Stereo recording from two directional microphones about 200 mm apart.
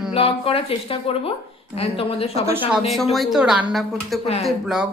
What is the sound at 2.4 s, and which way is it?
Speech, 10° right (ahead or behind).